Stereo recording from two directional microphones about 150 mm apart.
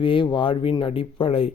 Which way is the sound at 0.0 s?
35° left (ahead or behind).